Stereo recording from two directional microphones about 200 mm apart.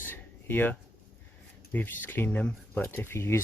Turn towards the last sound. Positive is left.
turn(degrees=10)  # may be behind; listen again after turning